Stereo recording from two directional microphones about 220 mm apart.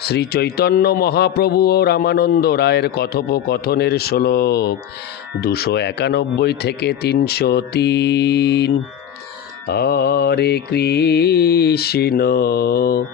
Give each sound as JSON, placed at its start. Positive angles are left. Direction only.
{"t": 0.0, "sound": "speech", "side_deg": 45}